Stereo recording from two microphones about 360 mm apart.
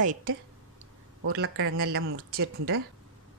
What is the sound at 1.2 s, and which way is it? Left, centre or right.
Speech, right.